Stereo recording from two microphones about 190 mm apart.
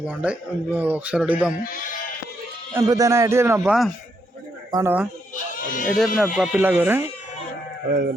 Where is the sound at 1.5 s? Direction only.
45° left (ahead or behind).